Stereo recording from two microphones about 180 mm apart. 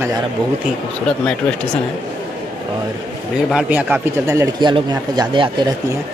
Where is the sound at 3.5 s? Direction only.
5° right (ahead or behind); by 5.6 s 25° right (ahead or behind).